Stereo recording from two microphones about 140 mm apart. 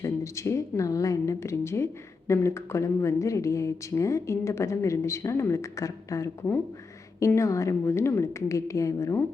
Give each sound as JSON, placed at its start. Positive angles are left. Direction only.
{"t": 0.0, "sound": "a woman's voice", "side_deg": 20}